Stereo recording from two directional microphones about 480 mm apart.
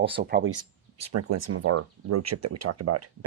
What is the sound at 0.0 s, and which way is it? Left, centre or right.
Speech, centre.